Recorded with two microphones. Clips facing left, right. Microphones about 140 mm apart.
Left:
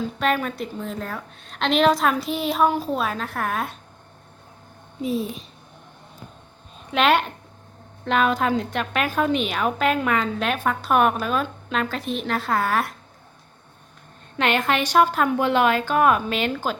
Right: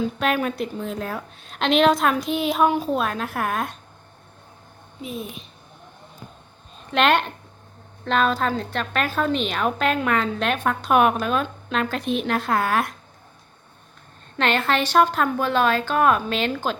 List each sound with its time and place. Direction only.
0.2 s a woman's voice: 5° right (ahead or behind)
5.0 s a child's voice: 30° left (ahead or behind)
6.9 s a woman's voice: 5° left (ahead or behind)
14.3 s speech: 10° left (ahead or behind)